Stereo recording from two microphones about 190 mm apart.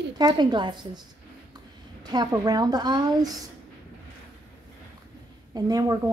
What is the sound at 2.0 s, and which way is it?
Speech, 20° right (ahead or behind).